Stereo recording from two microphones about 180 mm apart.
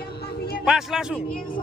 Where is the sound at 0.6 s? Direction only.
5° right (ahead or behind).